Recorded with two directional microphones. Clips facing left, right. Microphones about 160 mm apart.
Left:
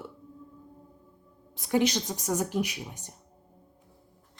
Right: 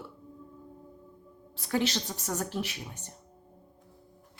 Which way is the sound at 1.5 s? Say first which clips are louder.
Left 4 dB; 15° left (ahead or behind).